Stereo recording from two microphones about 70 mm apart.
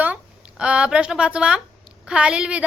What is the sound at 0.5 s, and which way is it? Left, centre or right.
A woman's voice, centre.